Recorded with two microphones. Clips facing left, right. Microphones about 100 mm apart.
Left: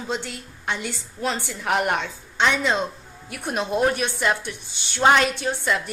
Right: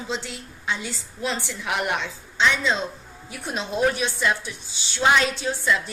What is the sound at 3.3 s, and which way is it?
Speech, 65° left (ahead or behind).